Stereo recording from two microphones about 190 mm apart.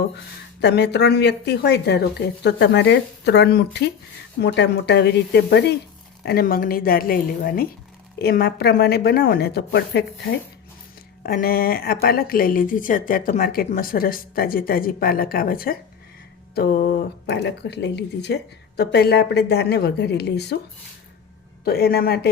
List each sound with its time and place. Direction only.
0.6 s speech: 60° left (ahead or behind)
21.6 s speech: 55° left (ahead or behind)